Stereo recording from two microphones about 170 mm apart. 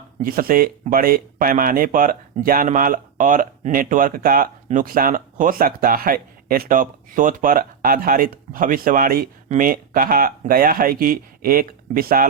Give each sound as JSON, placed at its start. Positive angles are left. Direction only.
{"t": 0.2, "sound": "speech", "side_deg": -60}